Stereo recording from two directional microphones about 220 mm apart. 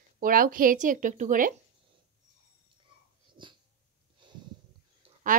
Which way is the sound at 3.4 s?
20° right (ahead or behind).